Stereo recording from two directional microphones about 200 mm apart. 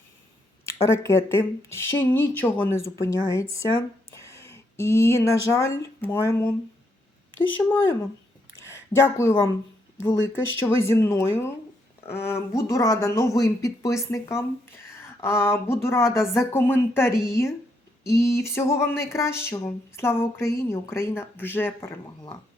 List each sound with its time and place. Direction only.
0.9 s speech: 15° left (ahead or behind)
8.5 s a sound: 15° left (ahead or behind)
10.6 s speech: 15° left (ahead or behind)